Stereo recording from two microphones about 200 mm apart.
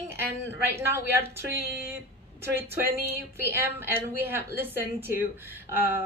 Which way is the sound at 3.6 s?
10° right (ahead or behind).